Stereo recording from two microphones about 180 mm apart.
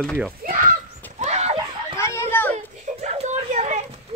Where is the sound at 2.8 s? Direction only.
35° right (ahead or behind).